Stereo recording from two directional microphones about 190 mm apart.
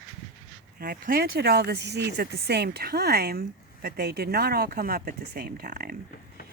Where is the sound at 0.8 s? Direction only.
50° right (ahead or behind).